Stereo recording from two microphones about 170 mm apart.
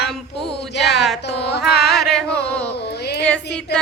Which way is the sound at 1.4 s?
75° left (ahead or behind).